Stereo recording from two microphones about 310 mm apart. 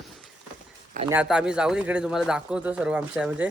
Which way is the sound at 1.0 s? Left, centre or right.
Centre.